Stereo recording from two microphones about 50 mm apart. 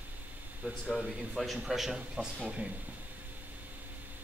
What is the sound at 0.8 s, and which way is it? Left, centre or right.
Speech, centre.